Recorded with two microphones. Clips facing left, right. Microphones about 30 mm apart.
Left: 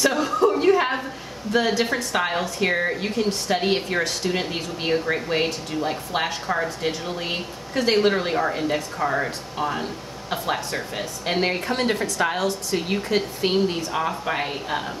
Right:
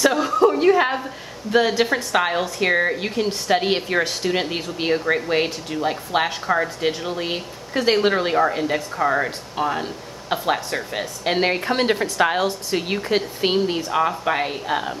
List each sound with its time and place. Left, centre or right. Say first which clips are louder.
0.0 s a sound: right 3 dB; centre
1.8 s a woman's voice: right 3 dB; centre
8.9 s a woman's voice: right 3 dB; right
11.6 s a woman's voice: right 3 dB; right; by 14.9 s centre